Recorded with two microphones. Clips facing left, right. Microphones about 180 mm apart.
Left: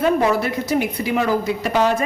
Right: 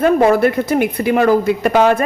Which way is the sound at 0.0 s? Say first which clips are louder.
Right 6 dB; 50° right (ahead or behind).